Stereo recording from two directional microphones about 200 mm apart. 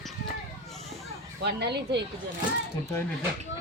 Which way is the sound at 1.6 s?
55° right (ahead or behind).